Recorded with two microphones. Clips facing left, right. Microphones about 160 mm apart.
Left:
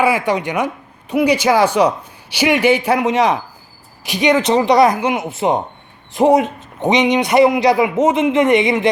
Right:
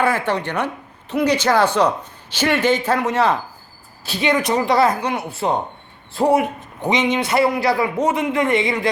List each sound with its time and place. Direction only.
0.0 s a man's voice: 10° left (ahead or behind)